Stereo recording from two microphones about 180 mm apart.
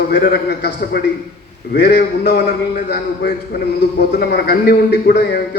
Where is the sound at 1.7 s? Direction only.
65° left (ahead or behind).